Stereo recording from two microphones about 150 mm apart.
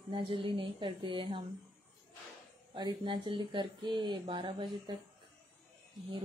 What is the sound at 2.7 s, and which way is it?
Speech, 30° right (ahead or behind).